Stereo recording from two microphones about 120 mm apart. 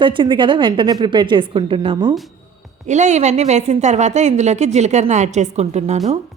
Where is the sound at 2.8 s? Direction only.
80° right.